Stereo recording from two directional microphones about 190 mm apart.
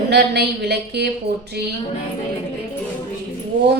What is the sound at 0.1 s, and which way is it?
Speech, 60° right (ahead or behind).